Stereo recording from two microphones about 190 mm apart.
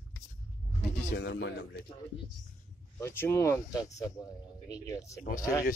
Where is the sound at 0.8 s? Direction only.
65° left (ahead or behind).